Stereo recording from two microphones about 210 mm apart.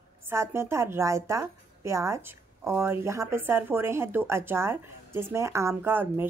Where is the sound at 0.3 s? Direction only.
10° right (ahead or behind).